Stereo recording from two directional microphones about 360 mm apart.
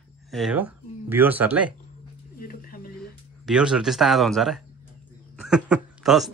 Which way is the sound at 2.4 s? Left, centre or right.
Left.